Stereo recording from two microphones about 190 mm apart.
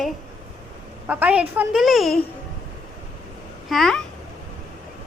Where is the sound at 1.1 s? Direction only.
5° right (ahead or behind).